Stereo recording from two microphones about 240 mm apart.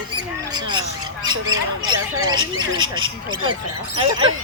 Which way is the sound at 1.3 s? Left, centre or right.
Right.